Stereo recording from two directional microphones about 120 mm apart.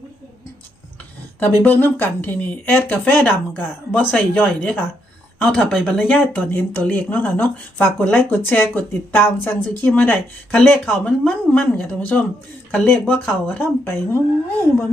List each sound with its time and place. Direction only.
1.4 s a woman's voice: 15° left (ahead or behind)